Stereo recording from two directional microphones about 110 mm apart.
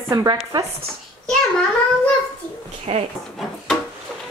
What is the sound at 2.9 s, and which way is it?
Speech, 65° right (ahead or behind).